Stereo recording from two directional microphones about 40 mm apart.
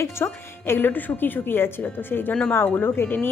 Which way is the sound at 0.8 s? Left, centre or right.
Left.